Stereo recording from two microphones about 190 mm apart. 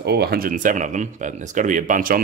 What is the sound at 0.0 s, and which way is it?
Speech, 60° right (ahead or behind).